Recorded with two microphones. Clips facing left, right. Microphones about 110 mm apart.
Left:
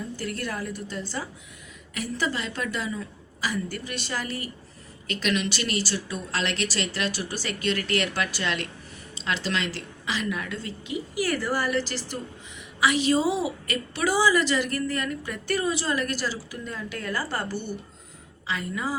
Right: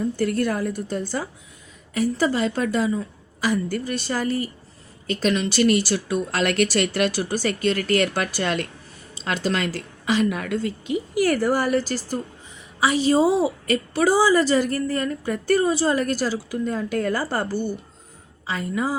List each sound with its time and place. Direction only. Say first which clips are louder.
0.0 s a woman's voice: right 10 dB; 50° right (ahead or behind)